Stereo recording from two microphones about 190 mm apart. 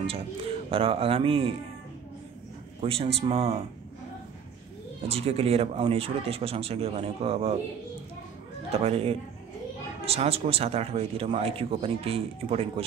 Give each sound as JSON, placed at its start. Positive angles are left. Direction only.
{"t": 0.7, "sound": "speech", "side_deg": -30}
{"t": 2.8, "sound": "speech", "side_deg": -30}
{"t": 5.0, "sound": "speech", "side_deg": -30}
{"t": 8.7, "sound": "speech", "side_deg": -30}